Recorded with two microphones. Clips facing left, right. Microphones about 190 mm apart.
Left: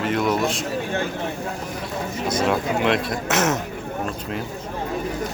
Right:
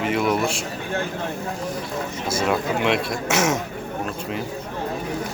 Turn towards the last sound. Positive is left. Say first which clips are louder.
# even
turn(degrees=0)  # may be behind; listen again after turning